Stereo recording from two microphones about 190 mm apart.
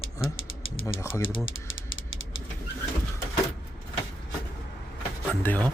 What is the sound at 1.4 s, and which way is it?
Typewriter, 90° left.